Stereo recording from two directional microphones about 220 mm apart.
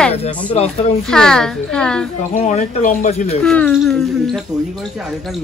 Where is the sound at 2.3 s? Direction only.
35° left (ahead or behind).